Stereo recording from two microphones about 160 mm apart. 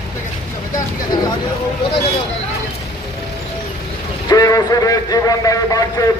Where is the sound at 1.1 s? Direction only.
25° left (ahead or behind).